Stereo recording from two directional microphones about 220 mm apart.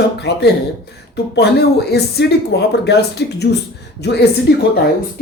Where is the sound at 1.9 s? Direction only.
50° left (ahead or behind).